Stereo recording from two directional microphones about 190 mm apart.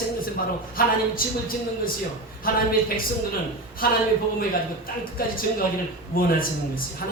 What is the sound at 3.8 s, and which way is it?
Speech, 50° left (ahead or behind).